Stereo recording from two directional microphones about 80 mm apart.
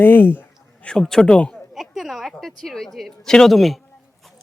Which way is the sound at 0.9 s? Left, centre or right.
Centre.